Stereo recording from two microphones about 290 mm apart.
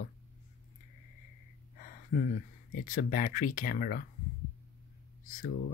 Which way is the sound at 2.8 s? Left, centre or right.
Left.